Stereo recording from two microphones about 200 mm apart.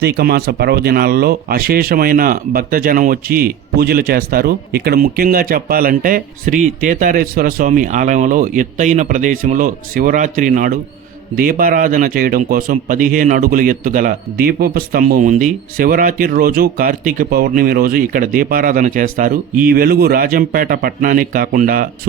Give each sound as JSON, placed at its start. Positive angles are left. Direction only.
{"t": 0.0, "sound": "speech", "side_deg": -50}